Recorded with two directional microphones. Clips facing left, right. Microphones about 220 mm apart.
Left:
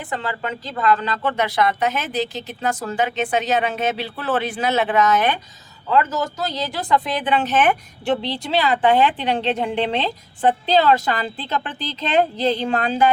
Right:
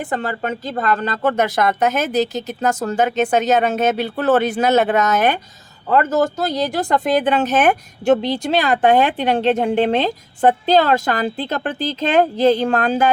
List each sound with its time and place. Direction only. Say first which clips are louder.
0.0 s speech: right 4 dB; 45° right (ahead or behind)